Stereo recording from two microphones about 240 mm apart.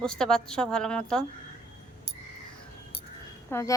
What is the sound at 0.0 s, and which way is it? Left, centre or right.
A woman's voice, centre.